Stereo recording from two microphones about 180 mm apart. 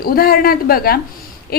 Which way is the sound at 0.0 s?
55° left (ahead or behind).